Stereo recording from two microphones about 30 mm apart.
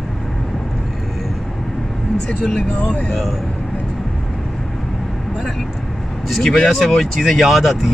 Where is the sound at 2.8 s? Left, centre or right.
Left.